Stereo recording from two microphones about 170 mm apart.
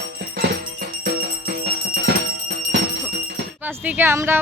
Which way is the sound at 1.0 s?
75° right (ahead or behind).